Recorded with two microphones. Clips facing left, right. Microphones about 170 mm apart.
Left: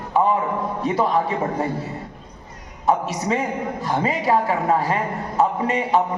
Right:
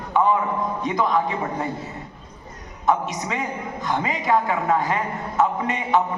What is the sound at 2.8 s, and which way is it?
A woman's voice, 40° left (ahead or behind).